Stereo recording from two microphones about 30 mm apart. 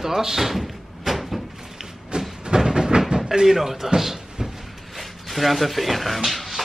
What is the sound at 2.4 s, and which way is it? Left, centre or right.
Train, right.